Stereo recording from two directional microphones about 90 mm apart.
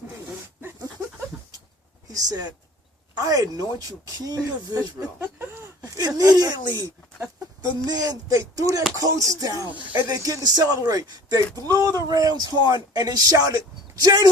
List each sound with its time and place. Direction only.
2.0 s speech: 45° right (ahead or behind)
10.2 s speech: 40° right (ahead or behind)